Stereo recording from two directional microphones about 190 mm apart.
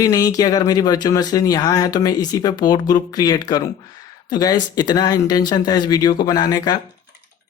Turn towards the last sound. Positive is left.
turn(degrees=20)  # may be behind; listen again after turning